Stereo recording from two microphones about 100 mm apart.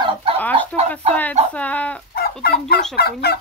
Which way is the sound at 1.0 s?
90° right.